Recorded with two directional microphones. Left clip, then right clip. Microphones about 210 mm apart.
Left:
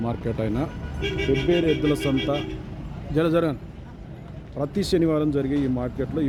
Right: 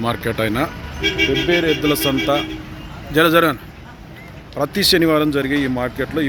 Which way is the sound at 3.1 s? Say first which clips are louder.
Right 8 dB; centre (ahead or behind).